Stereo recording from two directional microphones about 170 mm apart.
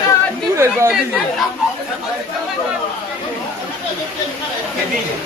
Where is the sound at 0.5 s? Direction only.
15° right (ahead or behind).